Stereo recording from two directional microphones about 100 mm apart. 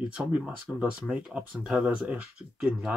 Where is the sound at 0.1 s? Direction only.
15° right (ahead or behind).